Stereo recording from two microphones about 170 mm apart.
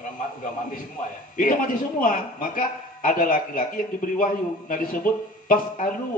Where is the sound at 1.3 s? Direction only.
55° left (ahead or behind).